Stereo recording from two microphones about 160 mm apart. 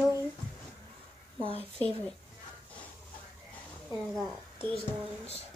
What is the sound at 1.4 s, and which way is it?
Speech, 35° right (ahead or behind).